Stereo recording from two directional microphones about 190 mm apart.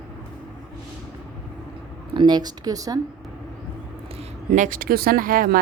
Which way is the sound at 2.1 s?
25° right (ahead or behind).